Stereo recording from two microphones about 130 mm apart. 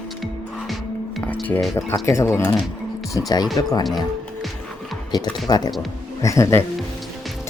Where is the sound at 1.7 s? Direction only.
20° left (ahead or behind).